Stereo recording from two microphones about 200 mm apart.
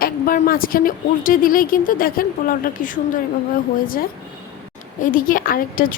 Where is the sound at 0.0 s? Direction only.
45° left (ahead or behind).